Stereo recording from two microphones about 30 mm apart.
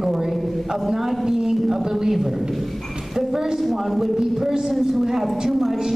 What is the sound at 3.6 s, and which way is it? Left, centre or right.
A woman's voice, centre.